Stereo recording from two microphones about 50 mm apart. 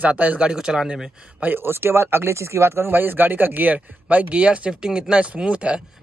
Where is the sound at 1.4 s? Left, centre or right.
Right.